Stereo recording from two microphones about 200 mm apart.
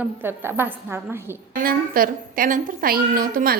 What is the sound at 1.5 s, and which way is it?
A woman's voice, 45° right (ahead or behind).